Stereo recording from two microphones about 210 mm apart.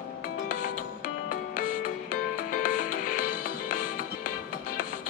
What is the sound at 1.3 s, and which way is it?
Music, 40° left (ahead or behind).